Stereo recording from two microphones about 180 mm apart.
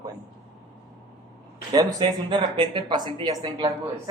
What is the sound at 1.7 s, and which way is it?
Speech, 20° right (ahead or behind).